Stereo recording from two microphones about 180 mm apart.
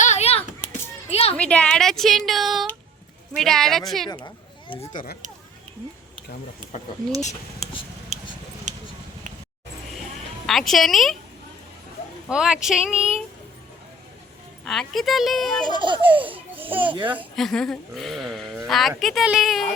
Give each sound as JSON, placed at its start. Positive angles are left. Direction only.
{"t": 0.0, "sound": "a sound", "side_deg": 40}
{"t": 1.4, "sound": "speech", "side_deg": 5}
{"t": 4.9, "sound": "speech", "side_deg": 45}
{"t": 10.4, "sound": "speech", "side_deg": 0}
{"t": 12.3, "sound": "speech", "side_deg": -5}
{"t": 14.6, "sound": "speech", "side_deg": 0}
{"t": 15.6, "sound": "speech", "side_deg": -25}
{"t": 17.2, "sound": "speech", "side_deg": 0}